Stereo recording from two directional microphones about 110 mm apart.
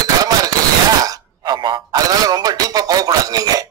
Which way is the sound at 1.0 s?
35° right (ahead or behind).